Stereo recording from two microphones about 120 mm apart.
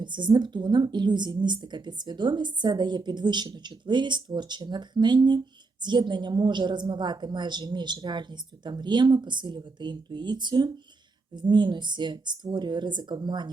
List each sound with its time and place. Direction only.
0.0 s a woman's voice: 40° right (ahead or behind)